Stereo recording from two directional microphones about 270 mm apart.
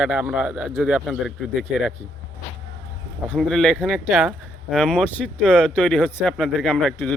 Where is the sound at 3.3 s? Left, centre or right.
Centre.